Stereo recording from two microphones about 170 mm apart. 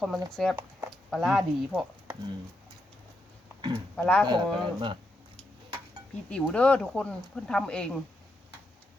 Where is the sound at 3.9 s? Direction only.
5° left (ahead or behind).